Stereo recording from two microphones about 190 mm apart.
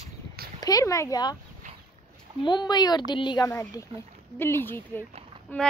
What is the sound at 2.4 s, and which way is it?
Speech, 25° left (ahead or behind).